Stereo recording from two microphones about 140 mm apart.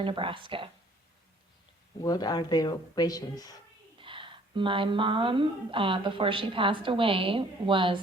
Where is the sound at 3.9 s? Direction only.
35° right (ahead or behind).